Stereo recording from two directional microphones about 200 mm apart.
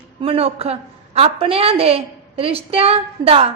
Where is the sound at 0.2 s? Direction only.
30° right (ahead or behind).